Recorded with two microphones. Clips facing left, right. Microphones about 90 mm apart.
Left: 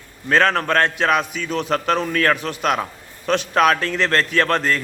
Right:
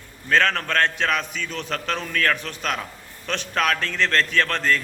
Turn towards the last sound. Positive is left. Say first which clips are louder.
# left 3 dB
turn(degrees=15)  # may be behind; listen again after turning